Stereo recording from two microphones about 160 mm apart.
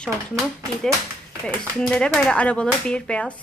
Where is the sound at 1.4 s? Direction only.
5° left (ahead or behind).